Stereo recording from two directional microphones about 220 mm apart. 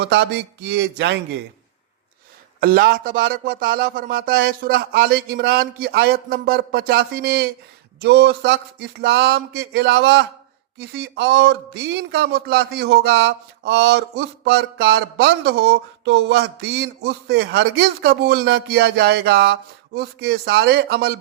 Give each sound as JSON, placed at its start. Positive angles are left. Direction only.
{"t": 0.0, "sound": "speech", "side_deg": -50}
{"t": 2.6, "sound": "speech", "side_deg": -40}